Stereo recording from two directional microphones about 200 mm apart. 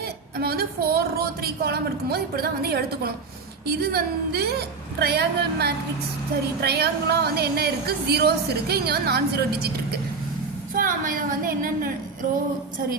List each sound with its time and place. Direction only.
0.3 s a woman's voice: 50° right (ahead or behind)